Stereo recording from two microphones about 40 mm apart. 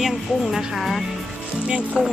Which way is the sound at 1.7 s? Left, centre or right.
Right.